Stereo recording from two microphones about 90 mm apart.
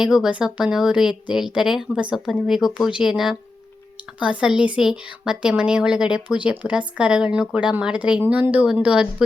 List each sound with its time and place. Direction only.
0.0 s speech: 5° right (ahead or behind)